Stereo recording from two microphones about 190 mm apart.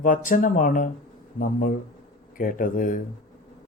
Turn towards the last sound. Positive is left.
turn(degrees=45)  # may be behind; listen again after turning